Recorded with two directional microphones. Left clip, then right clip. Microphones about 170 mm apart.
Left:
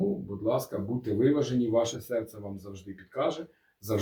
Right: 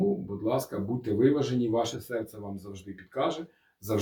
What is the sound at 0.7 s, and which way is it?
Speech, 15° right (ahead or behind).